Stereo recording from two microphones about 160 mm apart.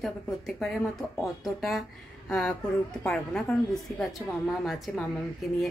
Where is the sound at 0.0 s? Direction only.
Centre (ahead or behind).